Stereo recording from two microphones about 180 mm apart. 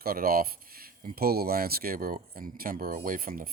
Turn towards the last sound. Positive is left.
turn(degrees=-50)  # may be behind; listen again after turning